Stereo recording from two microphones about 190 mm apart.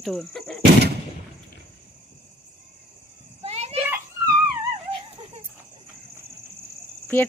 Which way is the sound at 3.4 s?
35° right (ahead or behind).